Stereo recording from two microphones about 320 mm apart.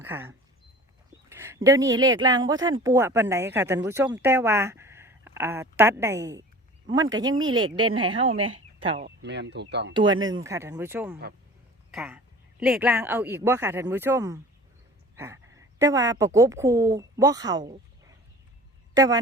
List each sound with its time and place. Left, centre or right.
0.0 s speech: centre
9.0 s speech: right
9.9 s a woman's voice: centre
17.7 s a sound: centre
18.9 s speech: centre